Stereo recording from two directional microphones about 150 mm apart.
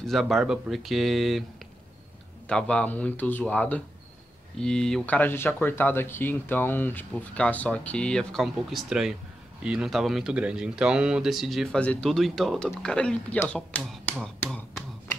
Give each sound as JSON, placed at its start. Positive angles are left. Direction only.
{"t": 0.0, "sound": "speech", "side_deg": 0}
{"t": 2.4, "sound": "speech", "side_deg": 10}
{"t": 14.4, "sound": "a sound", "side_deg": 10}